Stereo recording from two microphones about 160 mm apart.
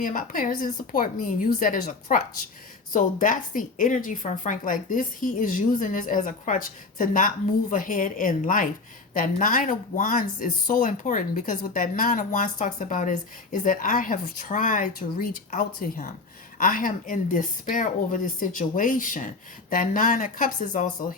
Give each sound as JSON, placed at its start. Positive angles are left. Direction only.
{"t": 0.0, "sound": "speech", "side_deg": 55}